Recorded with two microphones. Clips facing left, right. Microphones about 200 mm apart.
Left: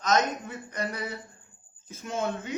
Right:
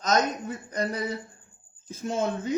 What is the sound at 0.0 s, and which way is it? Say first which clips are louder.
A man's voice: right 1 dB; 35° right (ahead or behind).